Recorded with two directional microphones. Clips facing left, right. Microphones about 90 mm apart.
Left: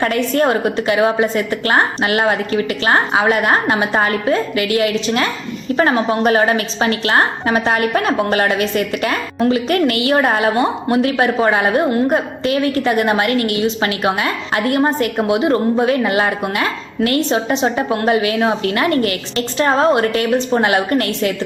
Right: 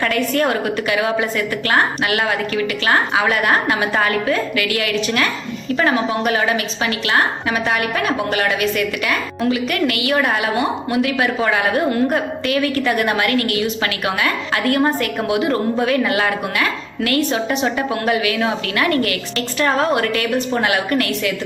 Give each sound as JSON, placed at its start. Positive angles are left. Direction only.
{"t": 0.0, "sound": "a woman's voice", "side_deg": 30}